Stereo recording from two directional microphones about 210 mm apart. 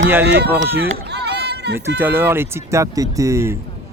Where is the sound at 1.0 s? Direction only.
50° right (ahead or behind).